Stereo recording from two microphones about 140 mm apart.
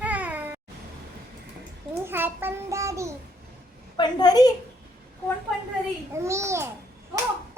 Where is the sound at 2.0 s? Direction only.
15° right (ahead or behind).